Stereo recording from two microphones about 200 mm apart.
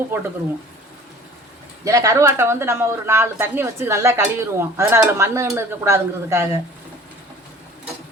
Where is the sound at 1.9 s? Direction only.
15° right (ahead or behind).